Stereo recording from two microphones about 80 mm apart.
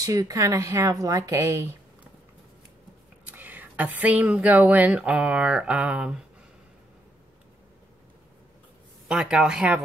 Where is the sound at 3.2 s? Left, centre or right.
Right.